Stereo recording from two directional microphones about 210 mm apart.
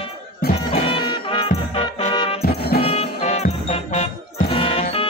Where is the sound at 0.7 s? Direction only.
25° left (ahead or behind).